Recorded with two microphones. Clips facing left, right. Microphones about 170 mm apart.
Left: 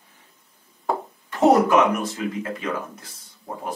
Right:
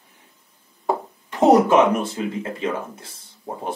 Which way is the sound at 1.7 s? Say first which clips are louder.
Right 2 dB; 30° right (ahead or behind).